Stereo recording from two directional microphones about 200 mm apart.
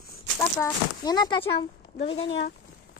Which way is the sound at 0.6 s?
20° left (ahead or behind).